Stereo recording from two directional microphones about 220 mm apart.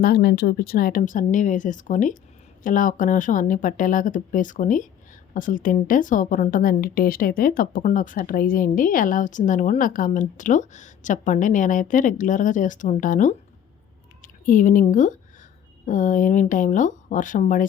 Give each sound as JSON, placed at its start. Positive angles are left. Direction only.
{"t": 0.0, "sound": "a woman's voice", "side_deg": 45}